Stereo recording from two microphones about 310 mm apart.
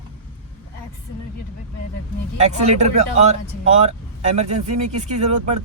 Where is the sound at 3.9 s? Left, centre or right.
Right.